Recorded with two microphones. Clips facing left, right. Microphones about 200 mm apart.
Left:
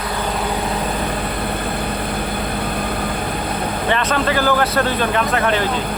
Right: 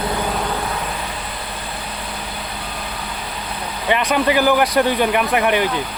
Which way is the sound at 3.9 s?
15° right (ahead or behind).